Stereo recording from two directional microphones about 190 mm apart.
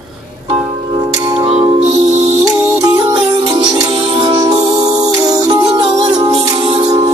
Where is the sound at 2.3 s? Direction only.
15° right (ahead or behind).